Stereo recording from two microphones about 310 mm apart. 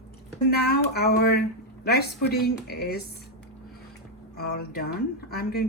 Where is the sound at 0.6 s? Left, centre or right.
Left.